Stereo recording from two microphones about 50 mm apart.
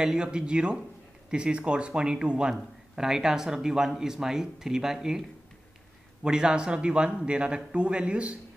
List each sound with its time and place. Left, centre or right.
0.0 s a man's voice: centre
6.2 s a man's voice: centre